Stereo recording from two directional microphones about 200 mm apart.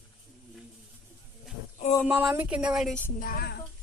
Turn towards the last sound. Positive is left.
turn(degrees=45)  # may be behind; listen again after turning